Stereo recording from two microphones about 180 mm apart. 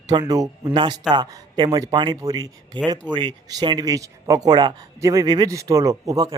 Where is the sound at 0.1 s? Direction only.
20° right (ahead or behind).